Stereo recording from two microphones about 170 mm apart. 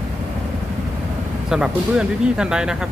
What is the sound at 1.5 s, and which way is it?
Speech, 5° right (ahead or behind).